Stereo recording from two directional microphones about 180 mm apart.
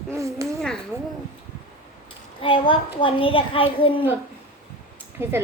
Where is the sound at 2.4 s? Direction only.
30° left (ahead or behind).